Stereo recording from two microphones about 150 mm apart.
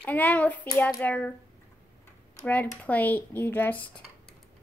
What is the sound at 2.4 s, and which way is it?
Speech, 10° left (ahead or behind).